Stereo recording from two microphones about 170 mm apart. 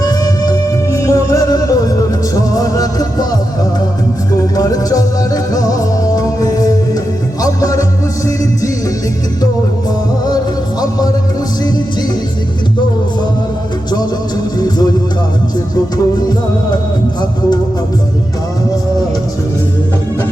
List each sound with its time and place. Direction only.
0.0 s music: 20° left (ahead or behind)
14.6 s music: 20° left (ahead or behind)